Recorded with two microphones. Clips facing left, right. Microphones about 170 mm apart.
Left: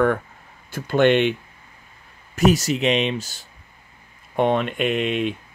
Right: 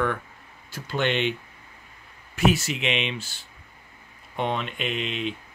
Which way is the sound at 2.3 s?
40° left (ahead or behind).